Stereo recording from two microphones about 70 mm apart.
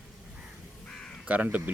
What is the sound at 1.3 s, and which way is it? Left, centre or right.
Speech, right.